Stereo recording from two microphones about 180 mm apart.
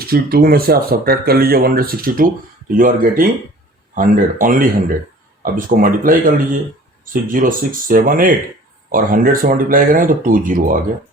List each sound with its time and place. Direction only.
0.0 s speech: 55° right (ahead or behind)